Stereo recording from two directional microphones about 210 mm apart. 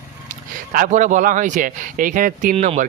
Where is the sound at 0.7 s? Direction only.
40° right (ahead or behind).